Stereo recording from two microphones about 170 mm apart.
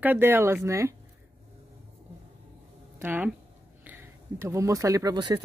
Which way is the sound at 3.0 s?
10° right (ahead or behind).